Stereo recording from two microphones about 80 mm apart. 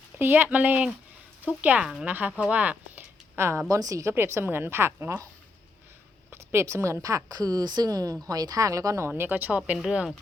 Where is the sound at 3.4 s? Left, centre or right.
Right.